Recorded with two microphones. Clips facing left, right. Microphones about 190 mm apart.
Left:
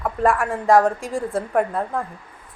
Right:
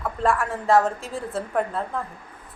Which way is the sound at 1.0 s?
15° left (ahead or behind).